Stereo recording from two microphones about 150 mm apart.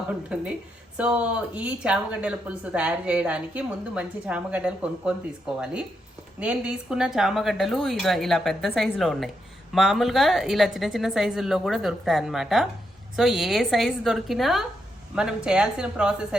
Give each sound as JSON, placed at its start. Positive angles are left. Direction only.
{"t": 0.3, "sound": "a woman's voice", "side_deg": -5}